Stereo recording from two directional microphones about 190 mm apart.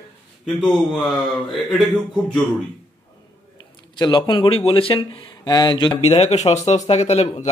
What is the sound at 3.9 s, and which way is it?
A man's voice, 20° left (ahead or behind).